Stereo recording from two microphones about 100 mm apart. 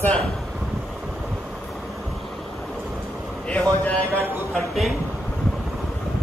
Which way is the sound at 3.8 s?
15° left (ahead or behind).